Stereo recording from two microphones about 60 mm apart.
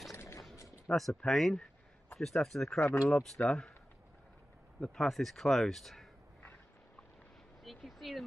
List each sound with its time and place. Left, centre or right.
0.1 s mechanisms: left
0.9 s speech: centre
4.7 s speech: centre
7.6 s a sound: centre